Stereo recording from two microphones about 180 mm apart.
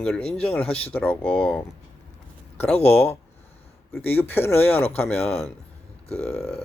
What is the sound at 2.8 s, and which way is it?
Speech, 10° left (ahead or behind).